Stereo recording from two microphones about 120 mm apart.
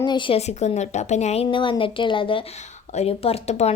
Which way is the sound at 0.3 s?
65° left (ahead or behind).